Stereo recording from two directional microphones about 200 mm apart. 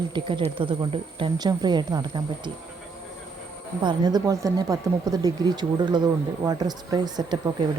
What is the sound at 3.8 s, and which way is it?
Speech, 20° right (ahead or behind).